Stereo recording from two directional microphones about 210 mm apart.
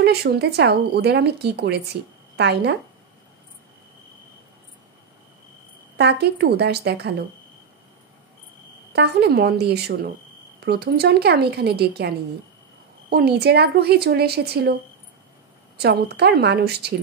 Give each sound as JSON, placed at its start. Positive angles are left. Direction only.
{"t": 0.0, "sound": "speech", "side_deg": -50}
{"t": 5.9, "sound": "speech", "side_deg": -55}
{"t": 8.9, "sound": "speech", "side_deg": -50}
{"t": 13.1, "sound": "speech", "side_deg": -50}
{"t": 15.8, "sound": "speech", "side_deg": -50}